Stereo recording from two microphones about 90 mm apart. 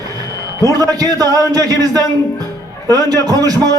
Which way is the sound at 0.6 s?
45° right (ahead or behind).